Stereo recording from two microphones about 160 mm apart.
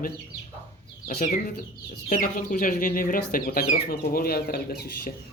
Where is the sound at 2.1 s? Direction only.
60° left (ahead or behind).